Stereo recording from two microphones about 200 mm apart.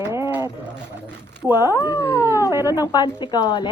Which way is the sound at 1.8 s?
15° left (ahead or behind).